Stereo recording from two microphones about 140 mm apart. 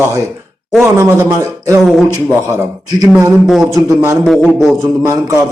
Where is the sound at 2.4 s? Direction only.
20° right (ahead or behind).